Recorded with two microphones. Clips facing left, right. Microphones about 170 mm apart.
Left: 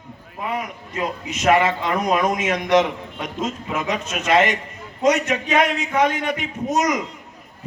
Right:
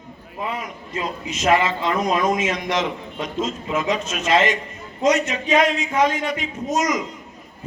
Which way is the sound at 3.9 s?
60° left (ahead or behind).